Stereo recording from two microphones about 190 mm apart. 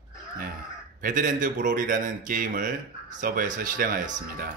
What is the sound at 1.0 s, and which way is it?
A man's voice, 45° right (ahead or behind).